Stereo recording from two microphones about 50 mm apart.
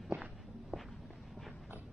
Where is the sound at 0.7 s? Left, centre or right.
Right.